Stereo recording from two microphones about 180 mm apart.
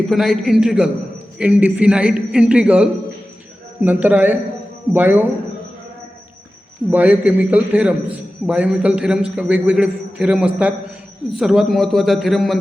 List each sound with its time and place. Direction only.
0.1 s a man's voice: centre (ahead or behind)
6.9 s a man's voice: 10° right (ahead or behind)